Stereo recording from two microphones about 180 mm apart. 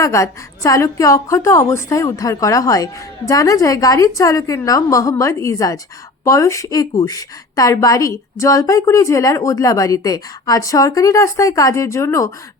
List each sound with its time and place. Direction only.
0.0 s a woman's voice: 15° left (ahead or behind)